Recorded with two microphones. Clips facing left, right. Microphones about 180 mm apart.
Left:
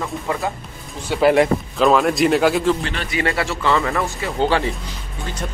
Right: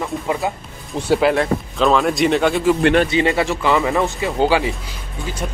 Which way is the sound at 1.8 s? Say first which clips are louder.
Left 1 dB; centre (ahead or behind).